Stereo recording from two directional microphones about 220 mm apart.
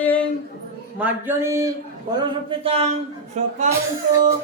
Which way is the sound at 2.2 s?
20° right (ahead or behind).